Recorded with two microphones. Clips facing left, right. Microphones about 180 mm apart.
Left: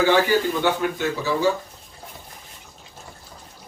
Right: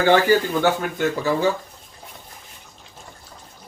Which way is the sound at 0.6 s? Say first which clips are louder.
Right 2 dB; 50° right (ahead or behind).